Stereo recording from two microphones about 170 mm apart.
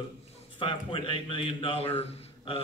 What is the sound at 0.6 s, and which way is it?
A man's voice, 30° left (ahead or behind).